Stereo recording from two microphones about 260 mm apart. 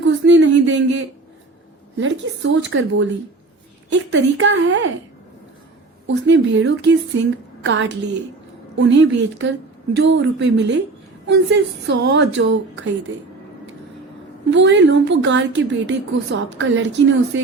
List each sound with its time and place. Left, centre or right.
0.0 s a sound: right
2.0 s a woman's voice: right
6.1 s a woman's voice: right
14.5 s a woman's voice: right